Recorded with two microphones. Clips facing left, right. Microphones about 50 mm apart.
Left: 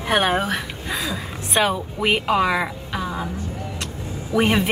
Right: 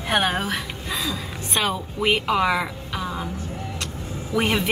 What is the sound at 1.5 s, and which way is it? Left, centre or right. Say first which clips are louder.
A woman's voice: left 4 dB; centre.